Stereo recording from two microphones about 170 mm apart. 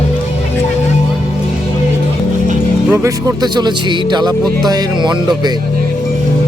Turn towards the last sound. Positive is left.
turn(degrees=-25)  # may be behind; listen again after turning